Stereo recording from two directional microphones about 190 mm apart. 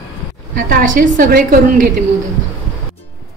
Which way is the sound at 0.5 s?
45° right (ahead or behind).